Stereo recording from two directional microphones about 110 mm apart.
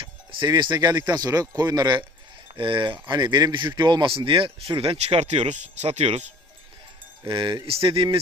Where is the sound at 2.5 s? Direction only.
50° right (ahead or behind); by 6.3 s 85° right.